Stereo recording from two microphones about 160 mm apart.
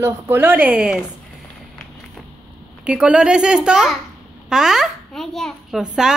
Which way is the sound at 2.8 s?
5° right (ahead or behind).